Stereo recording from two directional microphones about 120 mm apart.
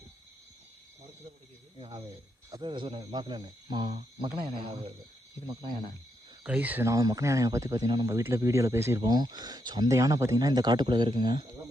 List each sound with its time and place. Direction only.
1.8 s speech: 45° right (ahead or behind)
6.4 s speech: 10° right (ahead or behind)
6.8 s speech: 30° right (ahead or behind)
9.0 s speech: 35° right (ahead or behind)